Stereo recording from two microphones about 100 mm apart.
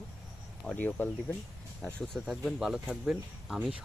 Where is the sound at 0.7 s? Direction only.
15° left (ahead or behind); by 3.6 s 5° right (ahead or behind).